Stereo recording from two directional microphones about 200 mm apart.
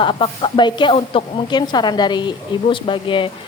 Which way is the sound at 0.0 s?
25° left (ahead or behind).